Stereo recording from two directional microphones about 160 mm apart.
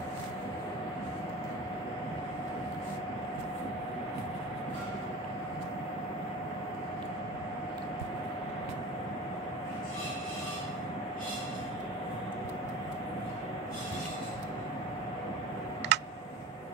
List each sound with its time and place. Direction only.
15.9 s tick: 90° right